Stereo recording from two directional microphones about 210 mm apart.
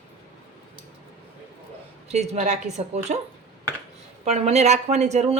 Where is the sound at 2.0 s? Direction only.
30° right (ahead or behind).